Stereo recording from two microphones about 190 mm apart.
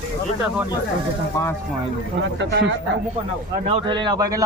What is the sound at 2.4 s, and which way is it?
Speech, 65° right (ahead or behind).